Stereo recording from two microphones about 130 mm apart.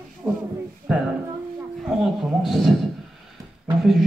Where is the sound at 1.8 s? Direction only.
5° right (ahead or behind).